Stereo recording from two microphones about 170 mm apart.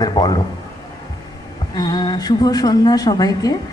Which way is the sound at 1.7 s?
25° left (ahead or behind).